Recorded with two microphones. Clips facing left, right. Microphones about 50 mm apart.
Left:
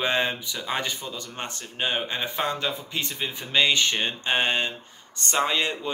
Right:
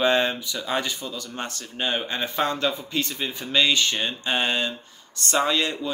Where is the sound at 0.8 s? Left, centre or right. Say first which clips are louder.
Right 1 dB; left.